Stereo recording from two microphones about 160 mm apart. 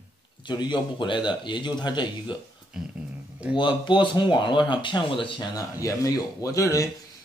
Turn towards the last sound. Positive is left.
turn(degrees=20)  # may be behind; listen again after turning